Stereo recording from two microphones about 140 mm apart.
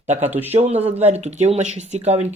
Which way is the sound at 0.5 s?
50° right (ahead or behind).